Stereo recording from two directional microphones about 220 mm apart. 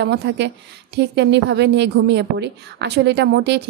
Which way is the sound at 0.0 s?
50° right (ahead or behind).